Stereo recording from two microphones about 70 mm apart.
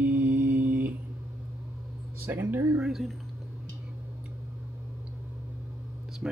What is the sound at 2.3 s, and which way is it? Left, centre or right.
Speech, right.